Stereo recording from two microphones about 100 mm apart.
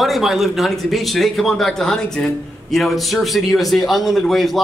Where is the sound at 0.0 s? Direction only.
Centre (ahead or behind).